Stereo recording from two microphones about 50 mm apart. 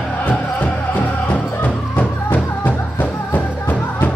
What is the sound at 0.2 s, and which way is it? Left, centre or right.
Music, left.